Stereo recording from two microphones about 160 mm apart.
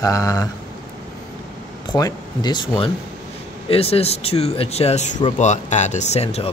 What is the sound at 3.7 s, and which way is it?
Speech, 40° left (ahead or behind).